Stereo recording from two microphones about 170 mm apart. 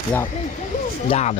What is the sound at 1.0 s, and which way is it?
Speech, 40° left (ahead or behind).